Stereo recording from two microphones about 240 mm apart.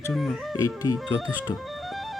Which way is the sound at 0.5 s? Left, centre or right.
Centre.